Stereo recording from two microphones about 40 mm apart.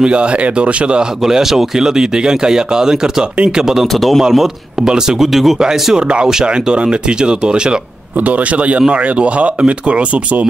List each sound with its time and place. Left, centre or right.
0.0 s speech: right
1.2 s speech: centre
3.8 s speech: centre
4.2 s speech: centre
4.7 s speech: centre
5.3 s speech: centre
5.6 s speech: centre
8.2 s speech: right